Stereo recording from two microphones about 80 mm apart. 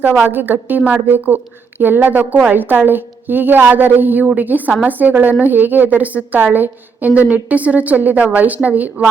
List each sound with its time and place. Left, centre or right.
0.0 s a woman's voice: centre